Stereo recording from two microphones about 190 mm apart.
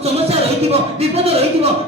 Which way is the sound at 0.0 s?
30° right (ahead or behind).